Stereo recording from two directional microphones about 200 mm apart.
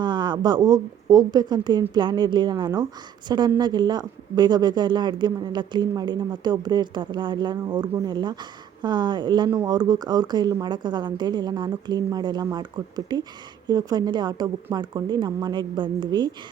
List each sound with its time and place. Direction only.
0.0 s speech: 20° right (ahead or behind)